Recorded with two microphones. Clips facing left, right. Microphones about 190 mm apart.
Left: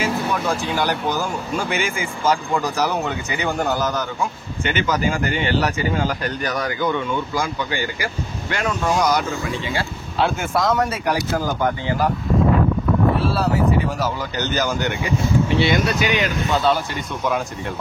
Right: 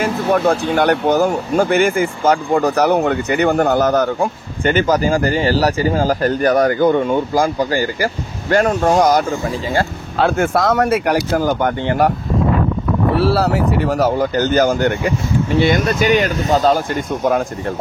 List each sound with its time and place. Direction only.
0.0 s speech: 55° right (ahead or behind)
4.7 s speech: 40° right (ahead or behind); by 12.1 s 65° right (ahead or behind)
13.2 s speech: 75° right (ahead or behind); by 17.4 s 45° right (ahead or behind)